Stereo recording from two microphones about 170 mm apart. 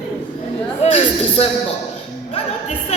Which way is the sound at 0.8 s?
35° left (ahead or behind).